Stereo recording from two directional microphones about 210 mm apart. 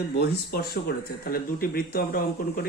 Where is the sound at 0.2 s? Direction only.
50° left (ahead or behind).